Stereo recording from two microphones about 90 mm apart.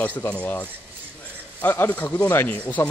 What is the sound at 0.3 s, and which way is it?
Speech, 15° left (ahead or behind).